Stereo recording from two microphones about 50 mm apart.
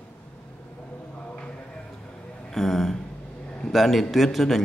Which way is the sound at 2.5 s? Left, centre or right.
Centre.